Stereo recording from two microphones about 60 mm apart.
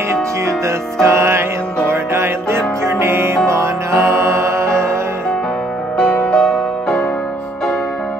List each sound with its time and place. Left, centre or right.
1.0 s music: right
5.9 s music: left
6.4 s music: centre